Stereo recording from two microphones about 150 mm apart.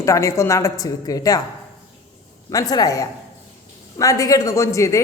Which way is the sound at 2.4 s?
25° left (ahead or behind).